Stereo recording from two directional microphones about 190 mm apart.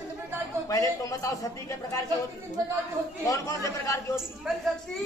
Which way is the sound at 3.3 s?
15° left (ahead or behind).